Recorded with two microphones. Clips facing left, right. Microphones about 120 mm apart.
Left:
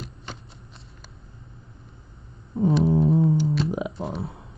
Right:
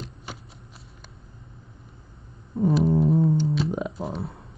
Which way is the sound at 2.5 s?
Centre (ahead or behind).